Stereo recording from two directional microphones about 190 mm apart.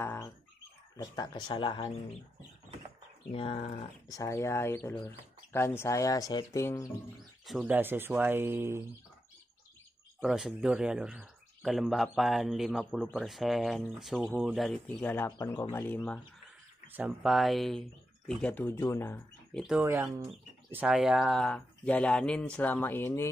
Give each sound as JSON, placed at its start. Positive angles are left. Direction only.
{"t": 0.0, "sound": "speech", "side_deg": 15}
{"t": 3.3, "sound": "speech", "side_deg": 30}
{"t": 4.1, "sound": "speech", "side_deg": 15}
{"t": 7.4, "sound": "speech", "side_deg": -5}
{"t": 10.2, "sound": "speech", "side_deg": -5}
{"t": 16.8, "sound": "speech", "side_deg": -10}
{"t": 19.5, "sound": "speech", "side_deg": 0}
{"t": 19.8, "sound": "speech", "side_deg": -10}